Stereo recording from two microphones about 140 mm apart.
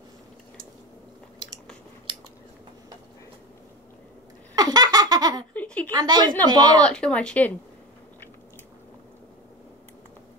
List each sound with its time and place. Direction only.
4.6 s laughter: 25° right (ahead or behind)
5.5 s a sound: 10° left (ahead or behind)
5.9 s speech: 30° right (ahead or behind)
6.8 s speech: 5° left (ahead or behind)